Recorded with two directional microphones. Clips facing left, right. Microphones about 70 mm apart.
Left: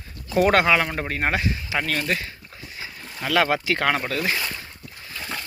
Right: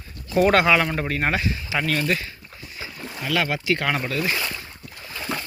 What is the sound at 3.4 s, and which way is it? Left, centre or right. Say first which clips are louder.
Speech: left 2 dB; left.